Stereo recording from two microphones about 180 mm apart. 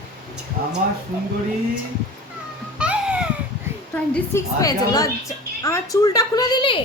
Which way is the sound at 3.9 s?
15° left (ahead or behind).